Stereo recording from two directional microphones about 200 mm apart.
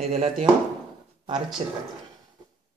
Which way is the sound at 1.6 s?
30° right (ahead or behind).